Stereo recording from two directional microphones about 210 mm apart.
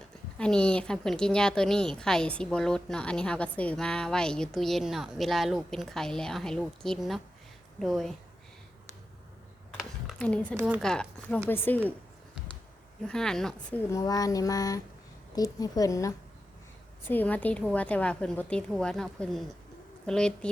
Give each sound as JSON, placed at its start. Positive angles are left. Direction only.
{"t": 0.3, "sound": "a woman's voice", "side_deg": 5}
{"t": 9.7, "sound": "a sound", "side_deg": 0}
{"t": 10.8, "sound": "a woman's voice", "side_deg": 5}
{"t": 11.4, "sound": "child singing", "side_deg": 10}
{"t": 13.1, "sound": "a woman's voice", "side_deg": 5}
{"t": 13.9, "sound": "child singing", "side_deg": 15}
{"t": 17.1, "sound": "a woman's voice", "side_deg": 10}